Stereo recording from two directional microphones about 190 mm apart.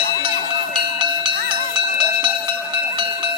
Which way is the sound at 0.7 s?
25° right (ahead or behind).